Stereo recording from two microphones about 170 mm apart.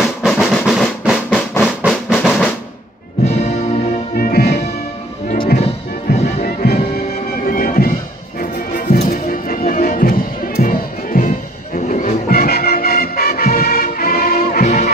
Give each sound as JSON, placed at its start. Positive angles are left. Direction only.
{"t": 0.0, "sound": "drum", "side_deg": 0}
{"t": 1.6, "sound": "music", "side_deg": -5}
{"t": 3.2, "sound": "music", "side_deg": 70}
{"t": 5.5, "sound": "music", "side_deg": 65}